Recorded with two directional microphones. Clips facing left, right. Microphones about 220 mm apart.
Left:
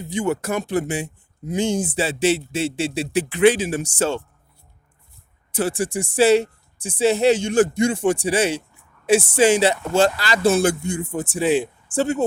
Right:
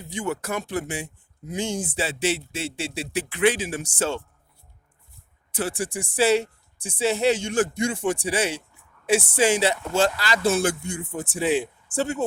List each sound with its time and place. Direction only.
0.1 s speech: 15° left (ahead or behind)
3.6 s speech: 35° left (ahead or behind)
5.5 s speech: 30° left (ahead or behind)
7.5 s speech: 35° left (ahead or behind)
9.1 s speech: 25° left (ahead or behind)